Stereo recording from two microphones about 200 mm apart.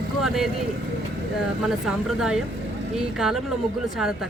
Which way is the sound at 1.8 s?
Centre (ahead or behind).